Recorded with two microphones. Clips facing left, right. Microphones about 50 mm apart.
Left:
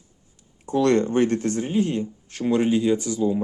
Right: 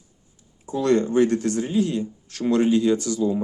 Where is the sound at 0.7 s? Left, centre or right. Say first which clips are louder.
Left 1 dB; left.